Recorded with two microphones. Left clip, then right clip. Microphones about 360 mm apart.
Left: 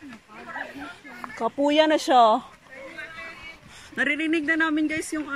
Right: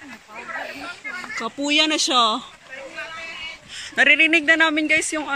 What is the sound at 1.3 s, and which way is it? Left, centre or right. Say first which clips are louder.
Speech: even; centre.